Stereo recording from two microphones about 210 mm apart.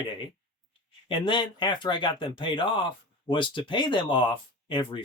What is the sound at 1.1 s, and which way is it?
Speech, 25° left (ahead or behind).